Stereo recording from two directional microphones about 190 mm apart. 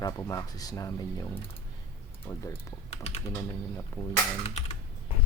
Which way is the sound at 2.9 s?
35° left (ahead or behind).